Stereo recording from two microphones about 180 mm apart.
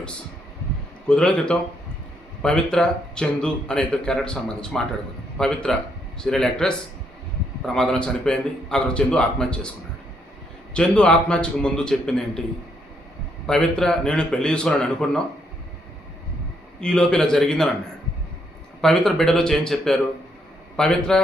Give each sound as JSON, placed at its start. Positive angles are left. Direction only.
{"t": 1.0, "sound": "speech", "side_deg": 5}
{"t": 10.8, "sound": "speech", "side_deg": 5}
{"t": 13.5, "sound": "speech", "side_deg": 5}
{"t": 16.8, "sound": "speech", "side_deg": 5}
{"t": 18.8, "sound": "speech", "side_deg": 0}